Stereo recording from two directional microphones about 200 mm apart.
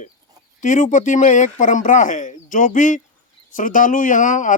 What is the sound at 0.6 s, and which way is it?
Speech, 40° left (ahead or behind).